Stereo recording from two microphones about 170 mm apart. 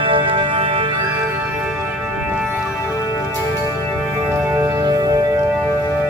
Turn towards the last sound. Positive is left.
turn(degrees=-20)  # may be behind; listen again after turning